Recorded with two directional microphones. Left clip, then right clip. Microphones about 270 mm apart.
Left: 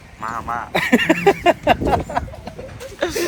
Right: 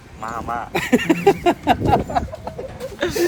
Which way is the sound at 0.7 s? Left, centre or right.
Left.